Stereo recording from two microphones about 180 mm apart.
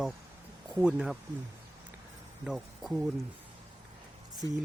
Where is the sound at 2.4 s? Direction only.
5° right (ahead or behind).